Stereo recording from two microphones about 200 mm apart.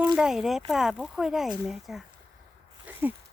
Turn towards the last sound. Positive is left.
turn(degrees=-10)  # may be behind; listen again after turning